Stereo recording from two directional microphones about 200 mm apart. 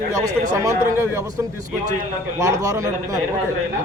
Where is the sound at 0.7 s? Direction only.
10° right (ahead or behind).